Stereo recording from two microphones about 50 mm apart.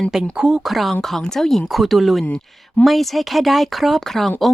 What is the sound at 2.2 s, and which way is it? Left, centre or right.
Speech, left.